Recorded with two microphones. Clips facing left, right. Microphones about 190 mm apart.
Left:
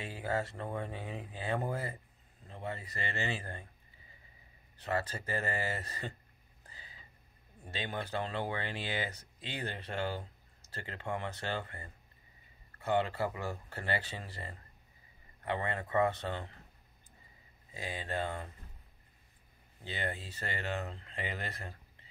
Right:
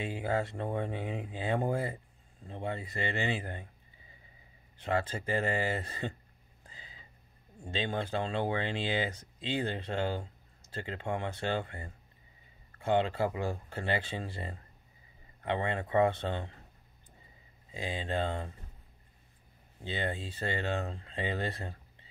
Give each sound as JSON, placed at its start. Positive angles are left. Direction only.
{"t": 0.0, "sound": "speech", "side_deg": -25}
{"t": 4.8, "sound": "speech", "side_deg": -20}
{"t": 7.6, "sound": "speech", "side_deg": -25}
{"t": 17.6, "sound": "speech", "side_deg": -20}
{"t": 19.8, "sound": "speech", "side_deg": -20}